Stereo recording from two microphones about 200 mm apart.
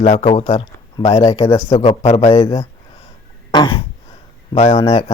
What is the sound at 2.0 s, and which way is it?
Speech, 30° left (ahead or behind).